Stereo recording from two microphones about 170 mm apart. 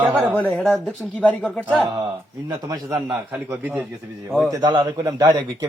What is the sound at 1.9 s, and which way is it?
A man's voice, 25° right (ahead or behind).